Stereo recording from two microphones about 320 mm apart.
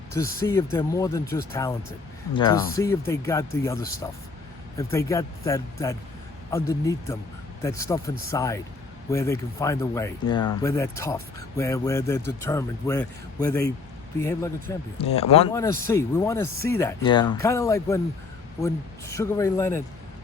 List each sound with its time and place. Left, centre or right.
0.1 s speech: centre